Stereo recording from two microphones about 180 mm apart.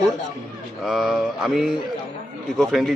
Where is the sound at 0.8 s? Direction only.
Centre (ahead or behind).